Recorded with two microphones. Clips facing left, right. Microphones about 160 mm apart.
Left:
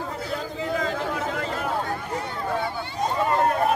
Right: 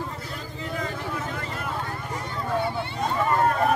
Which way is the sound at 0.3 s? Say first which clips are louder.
Left 6 dB; 90° left.